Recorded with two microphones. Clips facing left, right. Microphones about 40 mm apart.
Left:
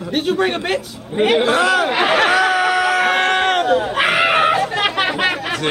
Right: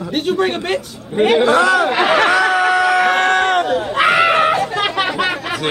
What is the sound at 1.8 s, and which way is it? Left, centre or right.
Speech, centre.